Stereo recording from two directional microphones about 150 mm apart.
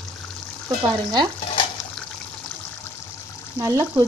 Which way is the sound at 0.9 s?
25° right (ahead or behind).